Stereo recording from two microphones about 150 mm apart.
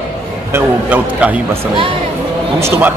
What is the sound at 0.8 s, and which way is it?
Speech, 10° right (ahead or behind).